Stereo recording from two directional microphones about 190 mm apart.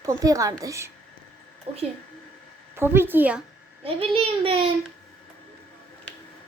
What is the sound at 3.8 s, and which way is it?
Speech, 30° right (ahead or behind).